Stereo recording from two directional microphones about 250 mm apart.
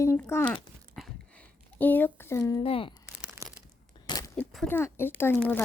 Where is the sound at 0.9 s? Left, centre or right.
Centre; by 2.9 s left.